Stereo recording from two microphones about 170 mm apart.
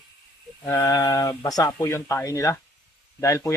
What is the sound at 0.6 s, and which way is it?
Speech, 15° left (ahead or behind).